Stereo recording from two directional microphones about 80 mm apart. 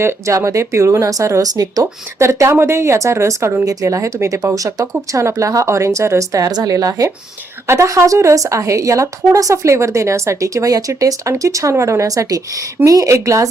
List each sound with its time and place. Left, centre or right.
0.0 s a woman's voice: right
3.7 s a woman's voice: right